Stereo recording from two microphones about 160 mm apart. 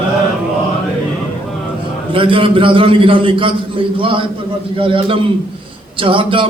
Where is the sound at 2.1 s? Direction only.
35° right (ahead or behind).